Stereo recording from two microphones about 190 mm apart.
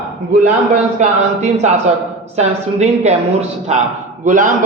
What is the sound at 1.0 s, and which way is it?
A woman's voice, 35° right (ahead or behind).